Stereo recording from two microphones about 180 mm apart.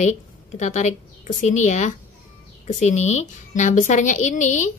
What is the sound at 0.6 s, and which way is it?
A woman's voice, 45° left (ahead or behind).